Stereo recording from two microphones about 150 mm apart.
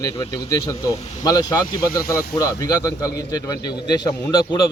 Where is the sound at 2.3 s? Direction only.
25° left (ahead or behind).